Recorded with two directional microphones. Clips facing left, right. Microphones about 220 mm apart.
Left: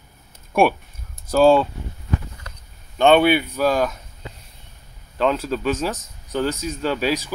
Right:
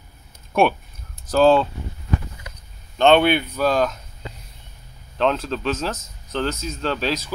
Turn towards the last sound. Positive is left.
turn(degrees=10)  # may be behind; listen again after turning